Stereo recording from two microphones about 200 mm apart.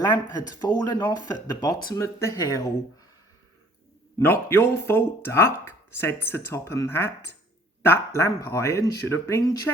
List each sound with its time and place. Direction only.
0.0 s speech: 20° left (ahead or behind)
4.2 s speech: 10° left (ahead or behind)